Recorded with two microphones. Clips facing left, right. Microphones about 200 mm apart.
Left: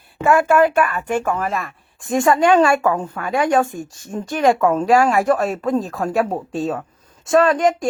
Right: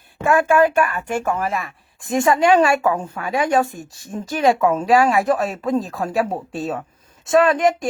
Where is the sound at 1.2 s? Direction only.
25° right (ahead or behind).